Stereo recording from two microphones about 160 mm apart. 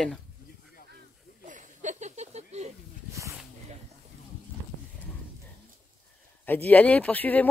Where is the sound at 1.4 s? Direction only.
50° right (ahead or behind).